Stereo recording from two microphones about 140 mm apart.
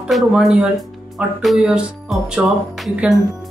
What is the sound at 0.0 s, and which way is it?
Speech, 5° right (ahead or behind).